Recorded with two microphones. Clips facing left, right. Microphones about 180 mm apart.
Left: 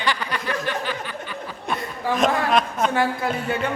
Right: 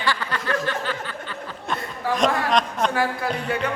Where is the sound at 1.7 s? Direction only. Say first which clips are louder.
Left 1 dB; 5° left (ahead or behind).